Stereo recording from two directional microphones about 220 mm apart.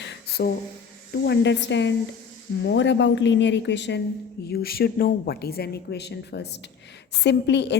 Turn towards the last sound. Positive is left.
turn(degrees=50)  # may be behind; listen again after turning